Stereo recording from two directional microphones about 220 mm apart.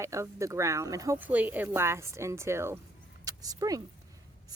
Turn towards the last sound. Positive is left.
turn(degrees=-15)  # may be behind; listen again after turning